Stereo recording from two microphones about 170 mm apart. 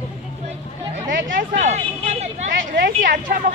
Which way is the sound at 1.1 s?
55° right (ahead or behind).